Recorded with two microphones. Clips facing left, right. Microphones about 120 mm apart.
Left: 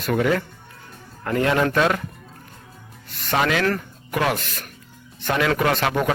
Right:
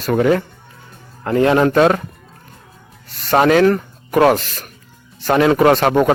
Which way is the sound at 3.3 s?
45° right (ahead or behind).